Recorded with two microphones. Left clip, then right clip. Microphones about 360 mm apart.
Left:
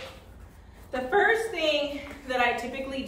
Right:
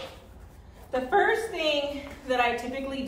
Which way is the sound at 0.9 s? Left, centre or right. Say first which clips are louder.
Even; centre.